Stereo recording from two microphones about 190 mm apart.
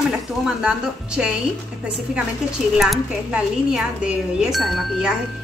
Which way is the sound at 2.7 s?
Centre (ahead or behind).